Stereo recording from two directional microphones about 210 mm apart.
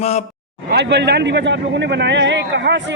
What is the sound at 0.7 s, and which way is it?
Speech, 50° right (ahead or behind).